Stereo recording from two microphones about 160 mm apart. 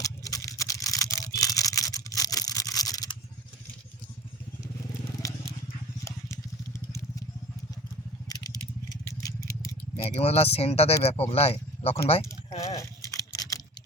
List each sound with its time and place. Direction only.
0.0 s toothbrush: 20° left (ahead or behind)
6.1 s vehicle: 20° left (ahead or behind)
8.3 s vehicle: 20° left (ahead or behind)
10.0 s speech: 40° left (ahead or behind)
12.7 s a sound: 20° left (ahead or behind)